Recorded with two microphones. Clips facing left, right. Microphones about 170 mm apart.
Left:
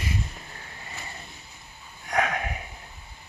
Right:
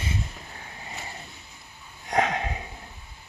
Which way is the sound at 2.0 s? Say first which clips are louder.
Right 2 dB; 25° right (ahead or behind).